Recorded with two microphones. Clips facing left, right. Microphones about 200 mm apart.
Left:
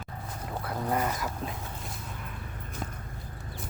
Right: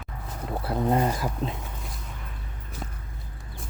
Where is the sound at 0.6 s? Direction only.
30° right (ahead or behind).